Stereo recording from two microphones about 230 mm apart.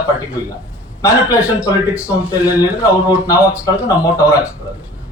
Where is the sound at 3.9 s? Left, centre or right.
Centre.